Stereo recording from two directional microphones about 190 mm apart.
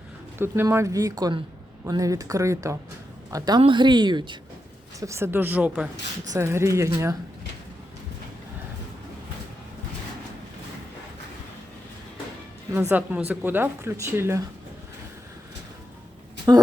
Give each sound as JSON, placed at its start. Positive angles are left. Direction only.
{"t": 0.3, "sound": "a woman's voice", "side_deg": -10}
{"t": 12.9, "sound": "speech", "side_deg": -10}
{"t": 16.5, "sound": "a sound", "side_deg": -20}